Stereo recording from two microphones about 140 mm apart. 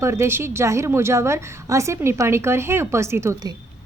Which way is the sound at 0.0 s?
20° right (ahead or behind).